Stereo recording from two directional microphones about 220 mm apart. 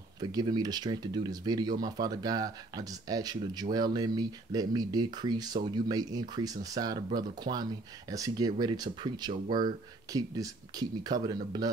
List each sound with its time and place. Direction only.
0.2 s speech: 15° right (ahead or behind)